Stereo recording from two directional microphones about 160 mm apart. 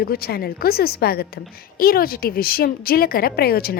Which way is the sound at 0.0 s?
75° left (ahead or behind).